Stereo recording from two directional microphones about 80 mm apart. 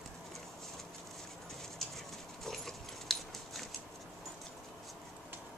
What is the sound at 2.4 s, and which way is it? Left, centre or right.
Dog, centre.